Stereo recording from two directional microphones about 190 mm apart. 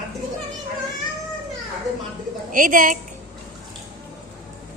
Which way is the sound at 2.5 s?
45° right (ahead or behind).